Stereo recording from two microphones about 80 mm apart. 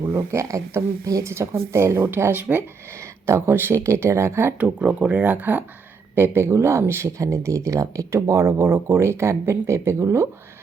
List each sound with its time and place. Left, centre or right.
0.1 s speech: right
3.0 s speech: right
4.5 s speech: centre; by 10.2 s right